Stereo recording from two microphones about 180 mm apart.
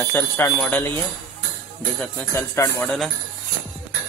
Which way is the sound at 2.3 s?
15° left (ahead or behind).